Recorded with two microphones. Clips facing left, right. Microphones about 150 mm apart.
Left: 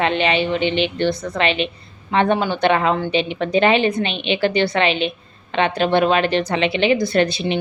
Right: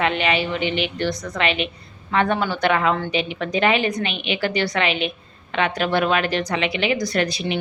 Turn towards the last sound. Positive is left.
turn(degrees=30)  # may be behind; listen again after turning